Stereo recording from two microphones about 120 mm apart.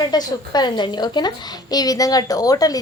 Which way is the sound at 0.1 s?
35° left (ahead or behind).